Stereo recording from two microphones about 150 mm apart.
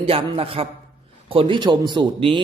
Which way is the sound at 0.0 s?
40° right (ahead or behind).